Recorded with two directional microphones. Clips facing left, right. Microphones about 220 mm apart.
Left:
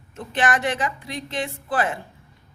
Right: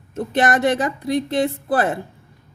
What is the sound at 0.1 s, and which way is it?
A woman's voice, 40° right (ahead or behind).